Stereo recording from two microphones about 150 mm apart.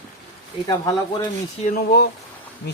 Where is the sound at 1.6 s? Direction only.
85° left.